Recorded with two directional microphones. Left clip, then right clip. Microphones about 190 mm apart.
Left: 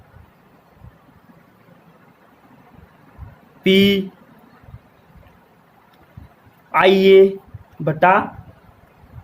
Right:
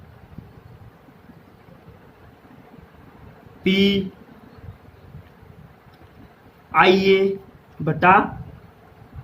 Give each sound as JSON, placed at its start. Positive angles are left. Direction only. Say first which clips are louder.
{"t": 3.6, "sound": "speech", "louder": "left 5 dB", "side_deg": 60}
{"t": 6.7, "sound": "speech", "louder": "left 3 dB", "side_deg": 60}